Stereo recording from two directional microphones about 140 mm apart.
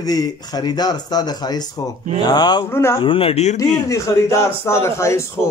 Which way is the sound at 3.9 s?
20° left (ahead or behind).